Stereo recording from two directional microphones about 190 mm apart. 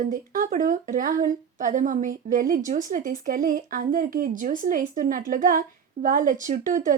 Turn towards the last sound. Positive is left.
turn(degrees=-45)  # may be behind; listen again after turning